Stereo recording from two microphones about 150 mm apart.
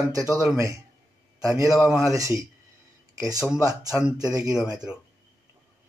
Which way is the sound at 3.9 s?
10° right (ahead or behind).